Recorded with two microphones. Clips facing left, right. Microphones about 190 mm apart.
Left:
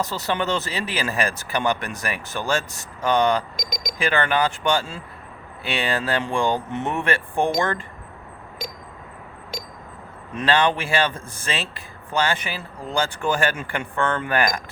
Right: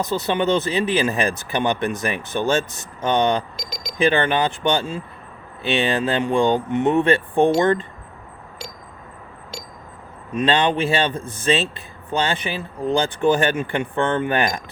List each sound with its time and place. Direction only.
0.0 s speech: 20° right (ahead or behind)
3.6 s speech: 15° left (ahead or behind)
4.0 s speech: 20° right (ahead or behind)
10.3 s speech: 20° right (ahead or behind)